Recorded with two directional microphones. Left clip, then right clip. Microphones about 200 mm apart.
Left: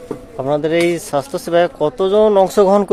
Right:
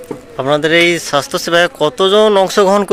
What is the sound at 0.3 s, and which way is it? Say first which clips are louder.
Speech: right 5 dB; centre (ahead or behind).